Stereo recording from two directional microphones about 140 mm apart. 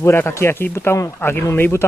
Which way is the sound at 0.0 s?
20° left (ahead or behind).